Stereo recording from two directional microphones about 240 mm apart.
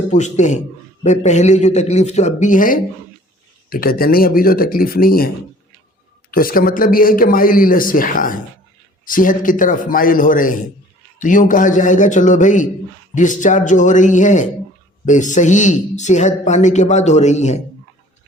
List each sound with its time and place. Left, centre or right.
0.1 s a man's voice: left
6.3 s a man's voice: left